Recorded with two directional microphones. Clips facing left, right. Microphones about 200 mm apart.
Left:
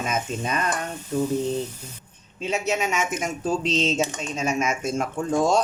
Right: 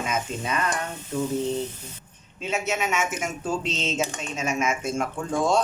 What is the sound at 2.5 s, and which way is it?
Speech, 35° left (ahead or behind).